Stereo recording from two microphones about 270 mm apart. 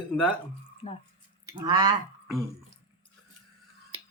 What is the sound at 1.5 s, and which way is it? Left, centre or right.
Speech, centre.